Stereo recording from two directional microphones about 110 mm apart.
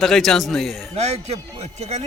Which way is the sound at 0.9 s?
85° right.